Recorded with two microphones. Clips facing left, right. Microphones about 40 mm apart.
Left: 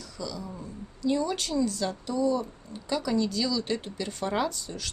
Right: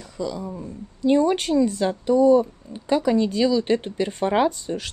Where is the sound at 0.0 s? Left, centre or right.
Right.